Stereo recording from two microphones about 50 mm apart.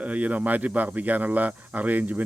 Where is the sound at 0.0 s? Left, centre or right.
Right.